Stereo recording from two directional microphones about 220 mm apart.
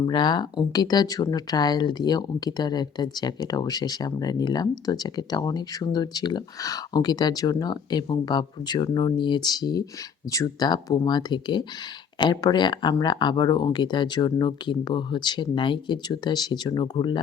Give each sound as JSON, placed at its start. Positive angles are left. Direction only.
{"t": 0.1, "sound": "speech", "side_deg": 20}